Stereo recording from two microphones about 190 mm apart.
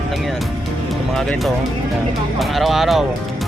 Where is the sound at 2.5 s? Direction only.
Centre (ahead or behind).